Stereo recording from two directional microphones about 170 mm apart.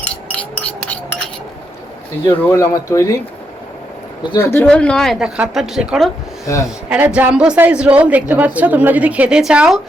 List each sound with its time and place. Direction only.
0.1 s a sound: 5° left (ahead or behind)
2.2 s speech: 15° left (ahead or behind)
4.4 s speech: 10° left (ahead or behind)
6.4 s speech: 20° left (ahead or behind)
6.9 s a woman's voice: 10° right (ahead or behind)